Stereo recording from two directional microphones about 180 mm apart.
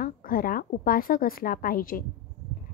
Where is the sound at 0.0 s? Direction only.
50° left (ahead or behind).